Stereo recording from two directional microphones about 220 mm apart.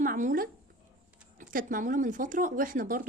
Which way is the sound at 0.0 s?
35° right (ahead or behind).